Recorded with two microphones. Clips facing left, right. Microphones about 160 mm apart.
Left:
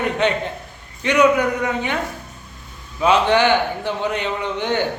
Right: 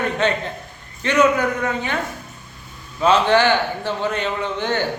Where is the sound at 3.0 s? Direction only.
15° left (ahead or behind).